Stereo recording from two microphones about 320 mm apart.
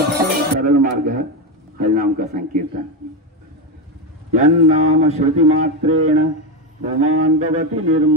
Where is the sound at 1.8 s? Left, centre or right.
Right.